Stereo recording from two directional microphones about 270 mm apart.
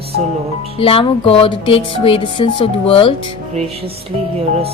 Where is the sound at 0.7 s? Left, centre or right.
Left.